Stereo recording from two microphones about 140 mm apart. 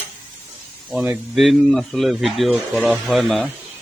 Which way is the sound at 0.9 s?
5° right (ahead or behind).